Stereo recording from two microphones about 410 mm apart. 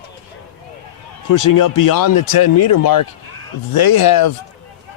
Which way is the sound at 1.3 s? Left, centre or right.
Left.